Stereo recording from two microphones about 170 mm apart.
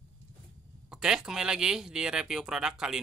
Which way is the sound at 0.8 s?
5° right (ahead or behind).